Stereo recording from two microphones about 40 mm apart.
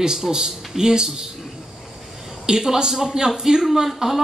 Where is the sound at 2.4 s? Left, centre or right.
Centre.